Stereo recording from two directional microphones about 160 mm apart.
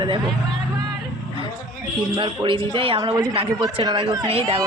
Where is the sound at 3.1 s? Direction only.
20° right (ahead or behind).